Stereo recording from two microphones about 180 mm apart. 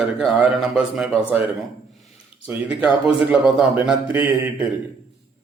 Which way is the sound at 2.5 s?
5° right (ahead or behind).